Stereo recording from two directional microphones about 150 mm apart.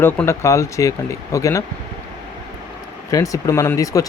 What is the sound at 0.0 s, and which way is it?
Speech, 15° left (ahead or behind).